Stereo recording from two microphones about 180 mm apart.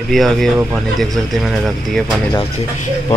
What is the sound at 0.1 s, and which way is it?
Speech, centre (ahead or behind).